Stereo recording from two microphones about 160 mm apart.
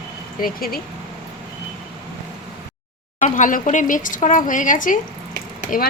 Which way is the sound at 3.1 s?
50° left (ahead or behind).